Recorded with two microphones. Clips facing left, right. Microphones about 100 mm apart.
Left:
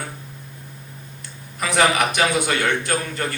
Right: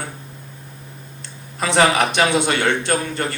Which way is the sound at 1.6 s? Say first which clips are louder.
Right 2 dB; 25° right (ahead or behind).